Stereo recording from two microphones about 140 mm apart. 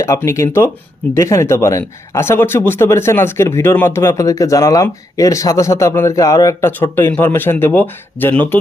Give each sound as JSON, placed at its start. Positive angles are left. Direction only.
{"t": 0.0, "sound": "speech", "side_deg": 20}